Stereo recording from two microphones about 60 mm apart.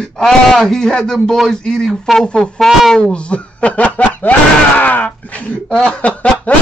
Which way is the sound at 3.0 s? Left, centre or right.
Centre.